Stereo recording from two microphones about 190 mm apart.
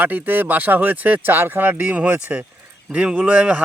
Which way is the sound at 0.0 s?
10° right (ahead or behind).